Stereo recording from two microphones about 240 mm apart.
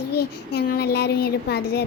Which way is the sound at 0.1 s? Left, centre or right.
Left.